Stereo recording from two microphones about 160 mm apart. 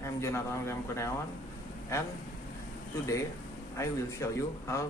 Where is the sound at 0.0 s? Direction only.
15° left (ahead or behind).